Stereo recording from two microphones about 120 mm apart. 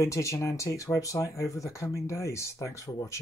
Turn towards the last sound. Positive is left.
turn(degrees=25)  # may be behind; listen again after turning